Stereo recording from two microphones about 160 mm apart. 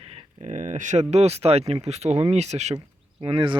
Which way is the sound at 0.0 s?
40° right (ahead or behind).